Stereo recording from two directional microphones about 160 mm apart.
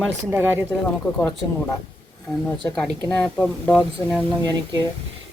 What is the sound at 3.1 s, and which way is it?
Speech, 5° left (ahead or behind).